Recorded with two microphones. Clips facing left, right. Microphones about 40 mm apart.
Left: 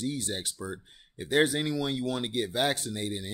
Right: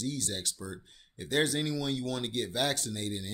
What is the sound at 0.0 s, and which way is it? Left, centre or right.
Speech, centre.